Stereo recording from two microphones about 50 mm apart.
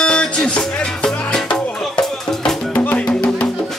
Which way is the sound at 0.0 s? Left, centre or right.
Centre.